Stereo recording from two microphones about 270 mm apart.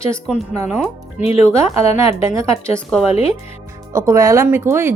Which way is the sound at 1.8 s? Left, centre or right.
Left.